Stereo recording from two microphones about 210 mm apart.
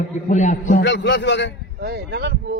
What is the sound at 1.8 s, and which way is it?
Speech, 50° right (ahead or behind).